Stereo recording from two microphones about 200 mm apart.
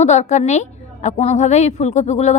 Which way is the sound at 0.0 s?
35° left (ahead or behind).